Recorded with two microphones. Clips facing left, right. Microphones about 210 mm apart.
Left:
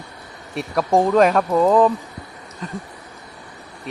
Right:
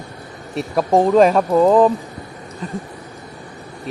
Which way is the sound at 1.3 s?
Centre (ahead or behind).